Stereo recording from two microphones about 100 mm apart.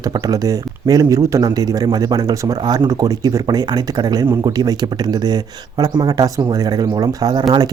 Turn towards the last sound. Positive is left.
turn(degrees=-40)  # may be behind; listen again after turning